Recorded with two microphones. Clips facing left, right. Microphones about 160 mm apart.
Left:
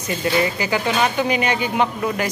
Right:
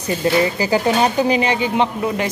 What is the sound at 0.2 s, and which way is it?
Speech, 30° right (ahead or behind).